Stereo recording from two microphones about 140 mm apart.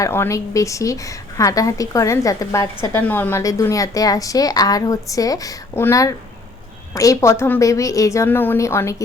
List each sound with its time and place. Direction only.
0.0 s speech: 20° left (ahead or behind)